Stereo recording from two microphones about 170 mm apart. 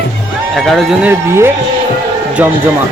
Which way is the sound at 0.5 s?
Centre (ahead or behind).